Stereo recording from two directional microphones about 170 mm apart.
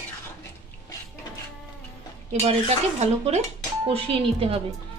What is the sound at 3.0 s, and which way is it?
Speech, 40° right (ahead or behind).